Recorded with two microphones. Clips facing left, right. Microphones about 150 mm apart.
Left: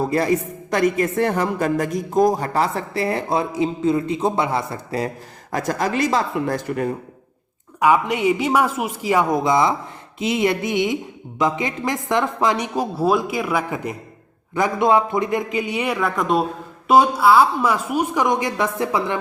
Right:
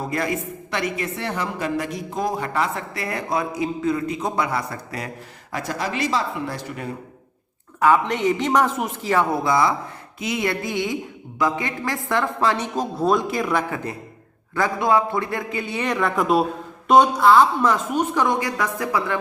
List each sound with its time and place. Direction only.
0.1 s a woman's voice: 35° left (ahead or behind)
7.8 s a woman's voice: 10° left (ahead or behind)